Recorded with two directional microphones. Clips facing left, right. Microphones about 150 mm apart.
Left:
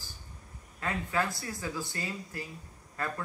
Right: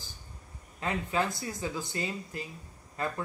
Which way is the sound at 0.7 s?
20° right (ahead or behind).